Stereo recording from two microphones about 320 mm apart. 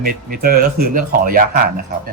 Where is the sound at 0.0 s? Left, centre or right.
Right.